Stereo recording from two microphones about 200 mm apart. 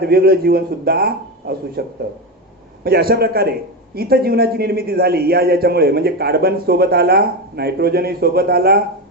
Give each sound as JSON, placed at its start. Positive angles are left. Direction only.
{"t": 0.0, "sound": "a man's voice", "side_deg": -50}
{"t": 2.8, "sound": "a man's voice", "side_deg": -50}